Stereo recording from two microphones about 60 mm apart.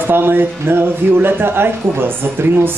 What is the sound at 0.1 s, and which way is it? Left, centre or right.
Speech, right.